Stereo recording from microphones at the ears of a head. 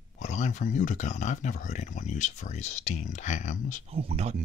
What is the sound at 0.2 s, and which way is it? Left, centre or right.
Speech, left.